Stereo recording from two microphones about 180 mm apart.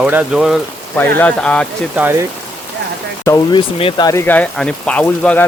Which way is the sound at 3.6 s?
30° left (ahead or behind).